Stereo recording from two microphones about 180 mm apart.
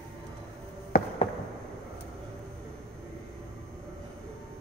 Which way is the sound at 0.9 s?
55° left (ahead or behind).